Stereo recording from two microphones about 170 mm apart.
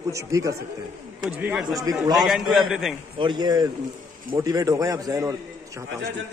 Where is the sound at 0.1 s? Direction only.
20° right (ahead or behind).